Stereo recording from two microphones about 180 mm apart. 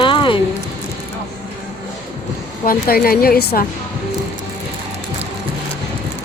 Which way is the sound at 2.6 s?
55° left (ahead or behind).